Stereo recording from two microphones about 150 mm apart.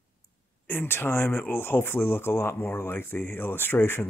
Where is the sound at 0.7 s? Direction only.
15° left (ahead or behind).